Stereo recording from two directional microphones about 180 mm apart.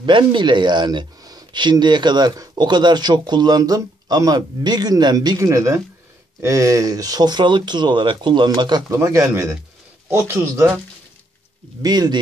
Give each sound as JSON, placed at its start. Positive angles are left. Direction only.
{"t": 0.0, "sound": "a man's voice", "side_deg": -25}
{"t": 11.8, "sound": "speech", "side_deg": -20}